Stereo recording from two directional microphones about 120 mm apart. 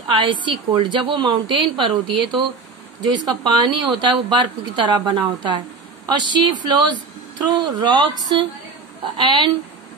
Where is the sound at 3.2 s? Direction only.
35° right (ahead or behind).